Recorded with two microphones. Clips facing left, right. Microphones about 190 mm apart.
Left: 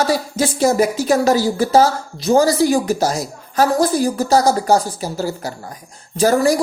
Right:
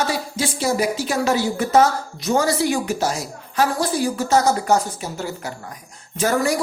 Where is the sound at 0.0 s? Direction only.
40° left (ahead or behind).